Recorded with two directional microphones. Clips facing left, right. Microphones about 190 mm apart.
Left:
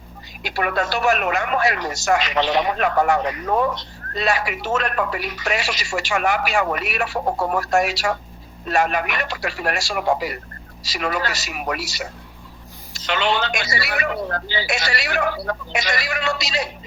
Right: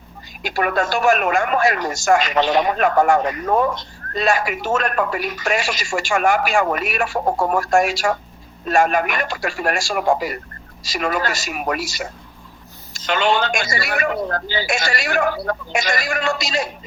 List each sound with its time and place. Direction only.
0.4 s speech: 45° right (ahead or behind)